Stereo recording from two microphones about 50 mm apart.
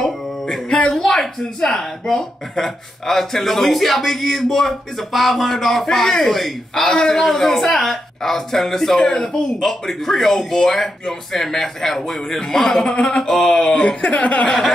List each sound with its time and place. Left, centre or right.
0.0 s speech: centre
12.8 s speech: left
13.3 s speech: centre
14.0 s speech: left